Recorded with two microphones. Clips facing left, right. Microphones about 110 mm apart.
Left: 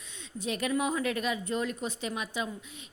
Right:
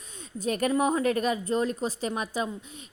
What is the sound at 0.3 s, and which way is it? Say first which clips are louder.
Speech: right 5 dB; 45° right (ahead or behind).